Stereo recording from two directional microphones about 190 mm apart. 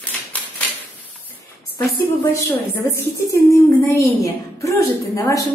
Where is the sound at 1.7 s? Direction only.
15° left (ahead or behind).